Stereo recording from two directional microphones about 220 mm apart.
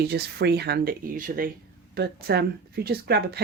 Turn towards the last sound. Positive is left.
turn(degrees=-45)  # may be behind; listen again after turning